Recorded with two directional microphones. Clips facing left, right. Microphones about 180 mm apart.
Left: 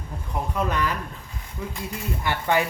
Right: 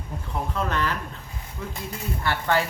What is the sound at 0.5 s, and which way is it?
Speech, 10° left (ahead or behind).